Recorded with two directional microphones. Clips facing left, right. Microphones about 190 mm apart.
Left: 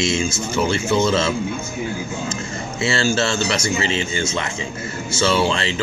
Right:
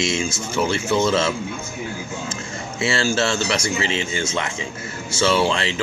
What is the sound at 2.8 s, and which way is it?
A man's voice, 10° right (ahead or behind).